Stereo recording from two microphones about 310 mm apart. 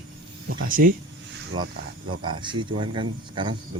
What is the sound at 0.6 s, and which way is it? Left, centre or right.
Speech, right.